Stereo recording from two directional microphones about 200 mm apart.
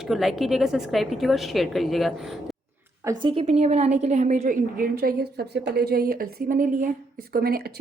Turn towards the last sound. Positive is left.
turn(degrees=-50)  # may be behind; listen again after turning